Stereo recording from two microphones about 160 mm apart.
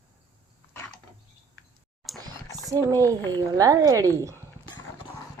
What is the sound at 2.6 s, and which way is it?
Speech, 20° right (ahead or behind).